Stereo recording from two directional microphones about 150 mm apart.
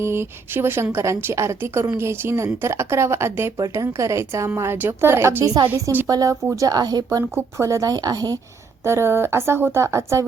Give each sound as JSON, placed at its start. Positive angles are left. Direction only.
{"t": 0.0, "sound": "a woman's voice", "side_deg": -15}